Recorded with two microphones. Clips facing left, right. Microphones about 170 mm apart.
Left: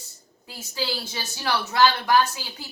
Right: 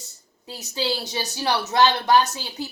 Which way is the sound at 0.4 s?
20° right (ahead or behind).